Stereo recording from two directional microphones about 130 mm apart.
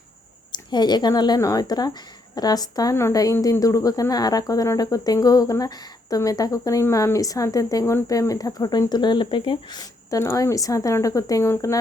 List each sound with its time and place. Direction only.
0.5 s speech: 35° left (ahead or behind)